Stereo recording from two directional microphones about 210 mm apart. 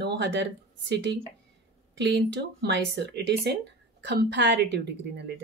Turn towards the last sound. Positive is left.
turn(degrees=-55)  # may be behind; listen again after turning